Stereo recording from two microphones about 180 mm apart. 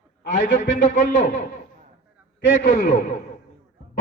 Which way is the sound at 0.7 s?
45° left (ahead or behind).